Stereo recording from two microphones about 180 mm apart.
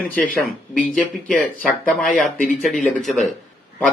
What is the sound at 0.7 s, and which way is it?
Speech, 5° left (ahead or behind).